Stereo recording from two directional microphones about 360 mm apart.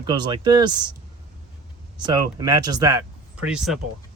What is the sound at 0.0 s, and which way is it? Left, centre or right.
Speech, centre.